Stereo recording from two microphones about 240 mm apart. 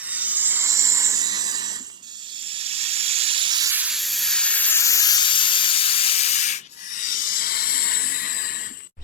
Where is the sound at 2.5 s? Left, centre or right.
Right.